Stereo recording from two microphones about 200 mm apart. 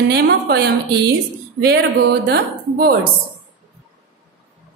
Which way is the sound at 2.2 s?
50° right (ahead or behind).